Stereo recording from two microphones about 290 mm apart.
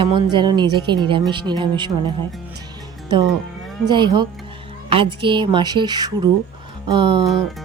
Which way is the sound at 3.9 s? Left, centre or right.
Centre.